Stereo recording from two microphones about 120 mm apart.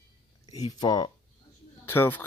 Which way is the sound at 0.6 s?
35° left (ahead or behind).